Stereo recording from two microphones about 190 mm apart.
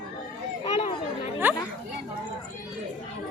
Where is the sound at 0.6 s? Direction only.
30° left (ahead or behind).